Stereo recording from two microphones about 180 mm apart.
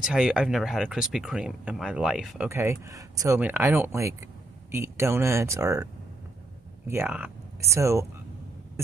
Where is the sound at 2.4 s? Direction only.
15° right (ahead or behind).